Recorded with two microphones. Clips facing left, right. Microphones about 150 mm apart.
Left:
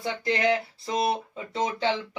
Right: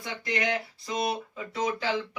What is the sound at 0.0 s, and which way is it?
Speech, 30° left (ahead or behind).